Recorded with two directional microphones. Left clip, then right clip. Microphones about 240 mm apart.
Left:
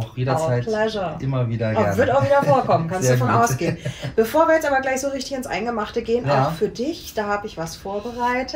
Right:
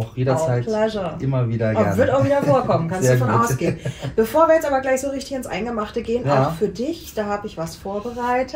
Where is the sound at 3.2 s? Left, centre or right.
Centre.